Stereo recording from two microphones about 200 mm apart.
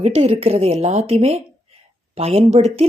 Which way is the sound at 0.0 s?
30° right (ahead or behind).